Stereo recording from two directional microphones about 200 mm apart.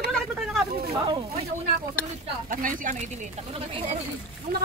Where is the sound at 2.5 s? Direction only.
40° right (ahead or behind).